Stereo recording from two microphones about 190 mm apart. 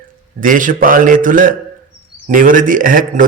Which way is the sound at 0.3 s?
45° right (ahead or behind).